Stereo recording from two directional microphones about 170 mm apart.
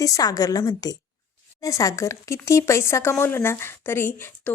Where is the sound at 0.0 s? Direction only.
20° left (ahead or behind).